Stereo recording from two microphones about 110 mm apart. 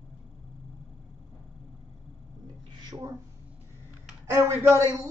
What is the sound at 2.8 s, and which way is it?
Speech, 30° right (ahead or behind).